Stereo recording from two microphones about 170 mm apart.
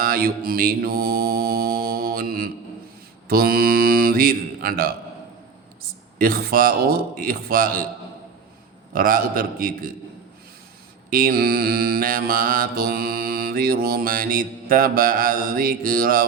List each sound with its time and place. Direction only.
0.0 s mantra: 60° right (ahead or behind)
6.1 s mantra: 60° right (ahead or behind)
8.9 s mantra: 55° right (ahead or behind)
11.1 s mantra: 55° right (ahead or behind)